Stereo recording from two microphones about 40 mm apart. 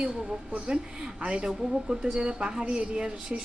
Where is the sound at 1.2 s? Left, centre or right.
Right.